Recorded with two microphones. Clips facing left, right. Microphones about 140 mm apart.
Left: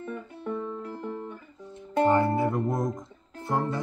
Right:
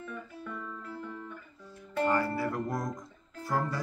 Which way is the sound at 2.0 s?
20° left (ahead or behind).